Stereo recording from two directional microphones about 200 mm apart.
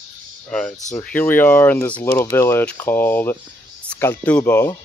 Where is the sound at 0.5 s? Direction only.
5° left (ahead or behind).